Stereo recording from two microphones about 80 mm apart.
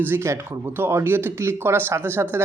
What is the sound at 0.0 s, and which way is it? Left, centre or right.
Speech, right.